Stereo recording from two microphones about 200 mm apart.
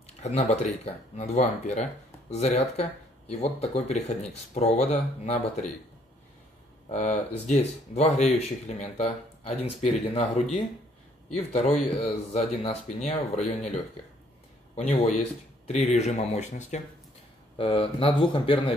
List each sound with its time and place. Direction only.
0.0 s speech: 30° left (ahead or behind)
6.9 s speech: 35° left (ahead or behind)
11.3 s speech: 35° left (ahead or behind)
14.8 s speech: 30° left (ahead or behind)